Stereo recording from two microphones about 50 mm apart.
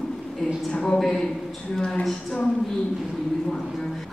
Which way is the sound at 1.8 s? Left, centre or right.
Centre.